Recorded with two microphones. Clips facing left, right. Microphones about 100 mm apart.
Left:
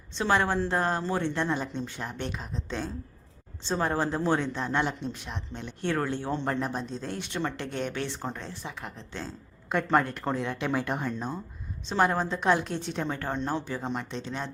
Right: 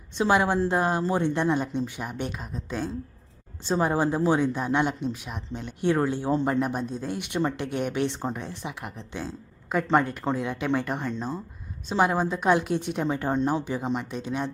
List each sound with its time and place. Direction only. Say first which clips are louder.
0.2 s speech: right 3 dB; 15° right (ahead or behind)
13.8 s speech: right 4 dB; 5° right (ahead or behind)